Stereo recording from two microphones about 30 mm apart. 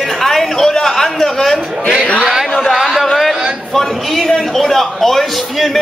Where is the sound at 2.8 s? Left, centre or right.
Centre.